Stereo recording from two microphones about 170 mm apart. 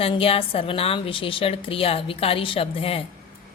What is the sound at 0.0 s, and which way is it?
A woman's voice, 35° left (ahead or behind).